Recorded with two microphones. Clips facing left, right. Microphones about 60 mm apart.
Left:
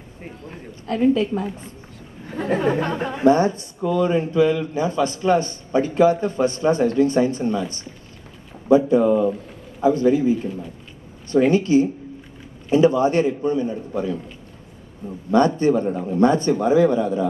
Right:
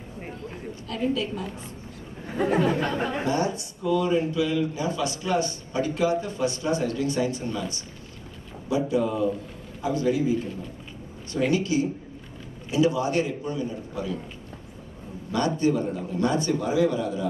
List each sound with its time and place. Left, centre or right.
0.5 s a man's voice: left
2.2 s speech: centre
2.6 s a man's voice: left
15.3 s a man's voice: left